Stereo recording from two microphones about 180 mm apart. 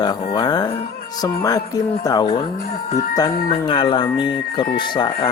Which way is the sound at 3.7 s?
30° left (ahead or behind).